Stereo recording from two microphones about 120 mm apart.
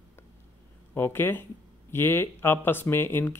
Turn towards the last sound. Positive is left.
turn(degrees=20)  # may be behind; listen again after turning